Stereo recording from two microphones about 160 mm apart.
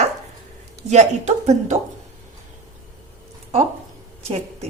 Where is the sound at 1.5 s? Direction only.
45° right (ahead or behind).